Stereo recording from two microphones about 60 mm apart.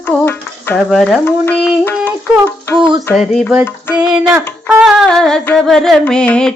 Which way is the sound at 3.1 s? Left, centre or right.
Centre.